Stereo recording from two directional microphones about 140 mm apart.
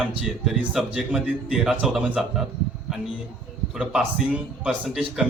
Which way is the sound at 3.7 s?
5° right (ahead or behind).